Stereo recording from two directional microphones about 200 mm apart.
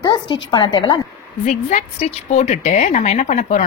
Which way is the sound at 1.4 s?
35° left (ahead or behind).